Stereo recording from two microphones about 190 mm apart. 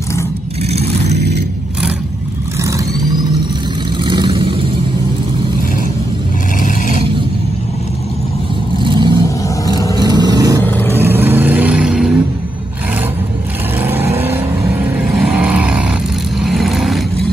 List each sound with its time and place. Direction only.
4.0 s vehicle: 25° right (ahead or behind)
6.6 s vehicle: 45° left (ahead or behind)
8.7 s vehicle: 25° right (ahead or behind)
9.2 s vehicle: 20° left (ahead or behind)
9.9 s vehicle: 20° right (ahead or behind)
10.9 s roar: 10° right (ahead or behind)
13.8 s vehicle: 10° right (ahead or behind)